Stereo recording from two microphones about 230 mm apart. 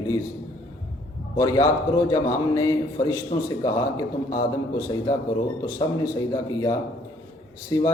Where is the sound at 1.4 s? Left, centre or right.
Centre.